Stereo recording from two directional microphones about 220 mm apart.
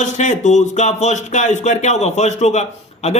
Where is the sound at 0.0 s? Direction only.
35° left (ahead or behind).